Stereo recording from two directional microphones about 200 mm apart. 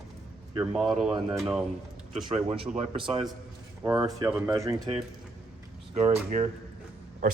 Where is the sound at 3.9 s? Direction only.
20° right (ahead or behind).